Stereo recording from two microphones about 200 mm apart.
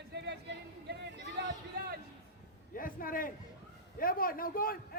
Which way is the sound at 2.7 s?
45° left (ahead or behind).